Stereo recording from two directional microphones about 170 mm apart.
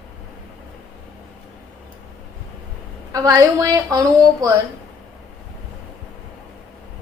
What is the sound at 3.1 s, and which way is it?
A woman's voice, 20° right (ahead or behind).